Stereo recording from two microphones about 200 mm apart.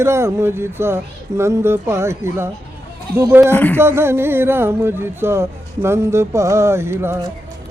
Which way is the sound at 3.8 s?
10° right (ahead or behind).